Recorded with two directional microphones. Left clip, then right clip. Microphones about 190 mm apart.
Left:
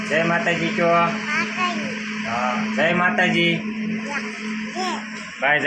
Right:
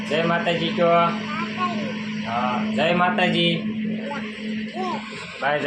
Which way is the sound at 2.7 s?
25° left (ahead or behind).